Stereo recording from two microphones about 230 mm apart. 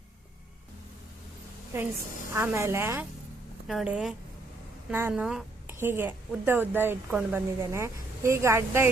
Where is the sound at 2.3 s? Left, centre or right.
Centre.